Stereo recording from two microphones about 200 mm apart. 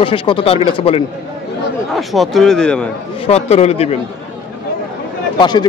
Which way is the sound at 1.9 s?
Centre (ahead or behind).